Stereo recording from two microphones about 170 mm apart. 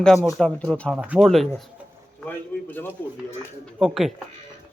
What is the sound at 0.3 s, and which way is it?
Speech, 5° left (ahead or behind).